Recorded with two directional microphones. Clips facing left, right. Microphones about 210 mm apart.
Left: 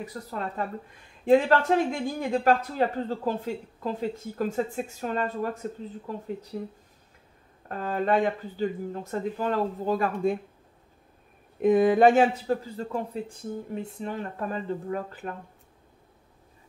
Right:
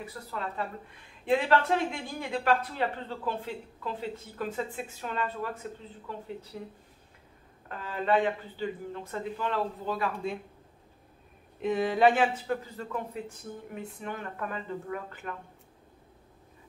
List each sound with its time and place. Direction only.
0.0 s speech: 40° left (ahead or behind)
11.6 s speech: 50° left (ahead or behind)